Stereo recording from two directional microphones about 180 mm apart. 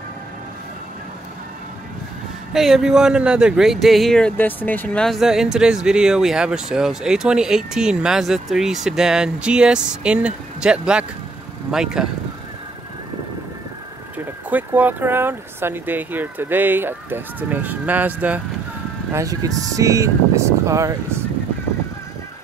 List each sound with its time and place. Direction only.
2.5 s speech: centre (ahead or behind)
14.1 s speech: 10° right (ahead or behind)